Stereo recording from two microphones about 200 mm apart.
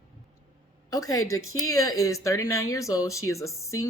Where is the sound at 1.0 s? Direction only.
90° left.